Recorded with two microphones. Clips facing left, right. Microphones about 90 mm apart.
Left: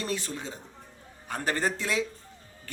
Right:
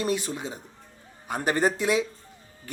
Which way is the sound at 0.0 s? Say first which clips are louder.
Right 5 dB; 15° right (ahead or behind).